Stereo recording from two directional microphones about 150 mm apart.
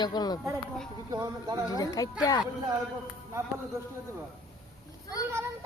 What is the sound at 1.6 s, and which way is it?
Speech, 25° left (ahead or behind).